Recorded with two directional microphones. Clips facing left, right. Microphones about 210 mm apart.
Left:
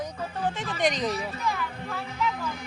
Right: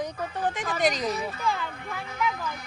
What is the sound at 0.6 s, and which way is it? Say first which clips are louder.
Speech: right 1 dB; 40° right (ahead or behind).